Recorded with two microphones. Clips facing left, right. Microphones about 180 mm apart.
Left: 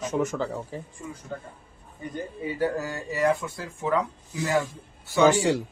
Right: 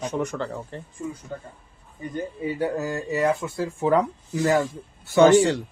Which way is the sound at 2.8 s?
25° right (ahead or behind).